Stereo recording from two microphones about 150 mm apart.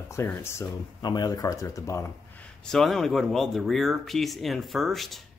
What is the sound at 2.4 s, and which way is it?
Speech, 5° left (ahead or behind).